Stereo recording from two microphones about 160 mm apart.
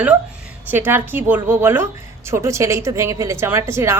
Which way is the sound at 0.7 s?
15° right (ahead or behind).